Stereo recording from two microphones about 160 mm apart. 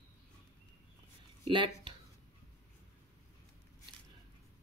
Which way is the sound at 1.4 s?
30° right (ahead or behind).